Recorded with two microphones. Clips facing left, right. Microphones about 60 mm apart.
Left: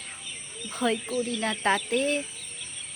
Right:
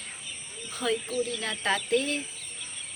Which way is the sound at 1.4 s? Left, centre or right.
Left.